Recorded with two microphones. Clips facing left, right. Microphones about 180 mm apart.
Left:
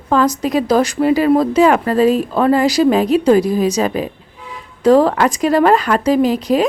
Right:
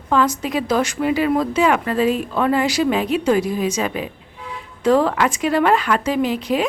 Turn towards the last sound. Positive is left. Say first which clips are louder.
# left 6 dB
turn(degrees=40)  # may be behind; listen again after turning